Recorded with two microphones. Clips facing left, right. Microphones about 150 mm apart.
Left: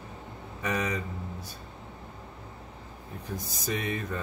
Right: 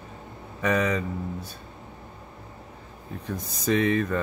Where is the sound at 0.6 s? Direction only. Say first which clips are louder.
Right 6 dB; 90° right.